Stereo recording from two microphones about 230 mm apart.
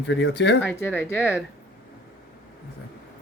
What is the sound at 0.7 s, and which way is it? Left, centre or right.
Speech, centre.